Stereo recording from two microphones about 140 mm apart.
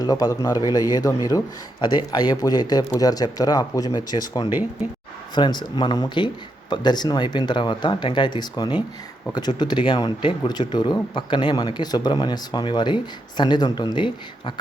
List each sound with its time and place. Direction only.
0.0 s a man's voice: 25° left (ahead or behind)